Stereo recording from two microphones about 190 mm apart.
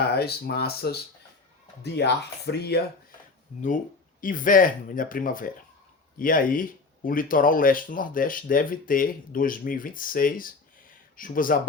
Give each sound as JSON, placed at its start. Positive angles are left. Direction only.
{"t": 0.2, "sound": "speech", "side_deg": 55}
{"t": 2.0, "sound": "speech", "side_deg": 60}
{"t": 4.2, "sound": "speech", "side_deg": 45}